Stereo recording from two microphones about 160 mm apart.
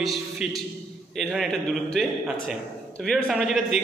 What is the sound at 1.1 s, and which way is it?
A man's voice, centre (ahead or behind).